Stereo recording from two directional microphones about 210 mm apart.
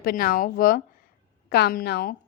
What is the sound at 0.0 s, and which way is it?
A woman's voice, 45° left (ahead or behind).